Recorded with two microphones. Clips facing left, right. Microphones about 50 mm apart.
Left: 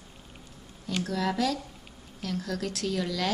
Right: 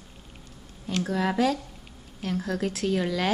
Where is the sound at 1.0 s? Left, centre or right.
Right.